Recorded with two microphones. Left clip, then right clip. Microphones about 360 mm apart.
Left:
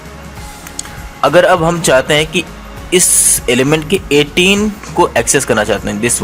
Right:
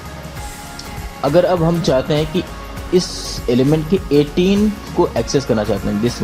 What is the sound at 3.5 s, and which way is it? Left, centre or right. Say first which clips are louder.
Speech: left 3 dB; left.